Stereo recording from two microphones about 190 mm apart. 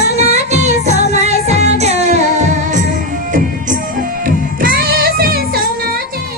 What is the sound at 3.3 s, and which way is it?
Music, 45° right (ahead or behind).